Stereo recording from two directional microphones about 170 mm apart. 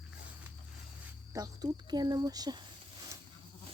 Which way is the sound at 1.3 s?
20° right (ahead or behind).